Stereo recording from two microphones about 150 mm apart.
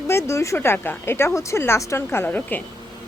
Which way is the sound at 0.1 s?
20° left (ahead or behind).